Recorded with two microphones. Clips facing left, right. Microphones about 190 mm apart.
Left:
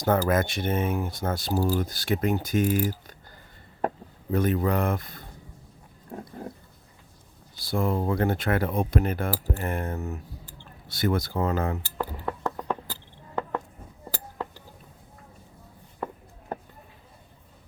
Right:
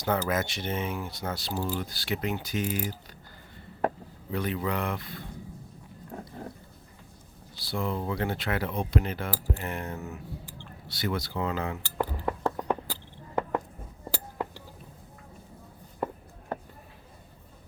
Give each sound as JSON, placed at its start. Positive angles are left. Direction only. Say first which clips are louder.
{"t": 0.0, "sound": "speech", "louder": "left 5 dB", "side_deg": 50}
{"t": 4.3, "sound": "speech", "louder": "left 6 dB", "side_deg": 45}
{"t": 7.6, "sound": "speech", "louder": "left 5 dB", "side_deg": 50}
{"t": 11.9, "sound": "a sound", "louder": "right 1 dB", "side_deg": -15}